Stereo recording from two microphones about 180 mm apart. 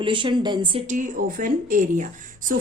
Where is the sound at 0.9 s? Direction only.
45° right (ahead or behind).